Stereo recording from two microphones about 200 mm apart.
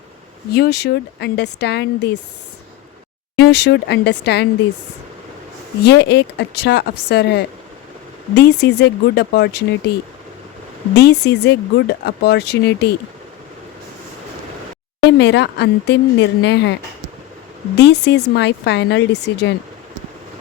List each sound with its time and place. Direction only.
0.5 s speech: 55° left (ahead or behind)
3.4 s speech: 55° left (ahead or behind)
5.8 s speech: 55° left (ahead or behind)
10.9 s speech: 55° left (ahead or behind)
15.0 s speech: 60° left (ahead or behind)
17.7 s speech: 60° left (ahead or behind)